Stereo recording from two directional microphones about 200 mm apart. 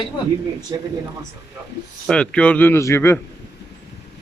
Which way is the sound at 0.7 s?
15° right (ahead or behind).